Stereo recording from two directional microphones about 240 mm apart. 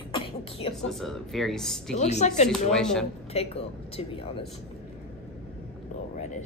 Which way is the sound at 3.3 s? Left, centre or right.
Left.